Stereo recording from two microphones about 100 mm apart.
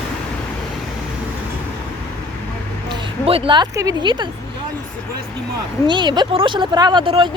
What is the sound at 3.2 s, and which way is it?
Speech, 70° right (ahead or behind).